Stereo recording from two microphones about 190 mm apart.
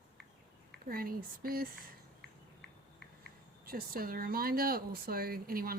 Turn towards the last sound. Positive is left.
turn(degrees=-50)  # may be behind; listen again after turning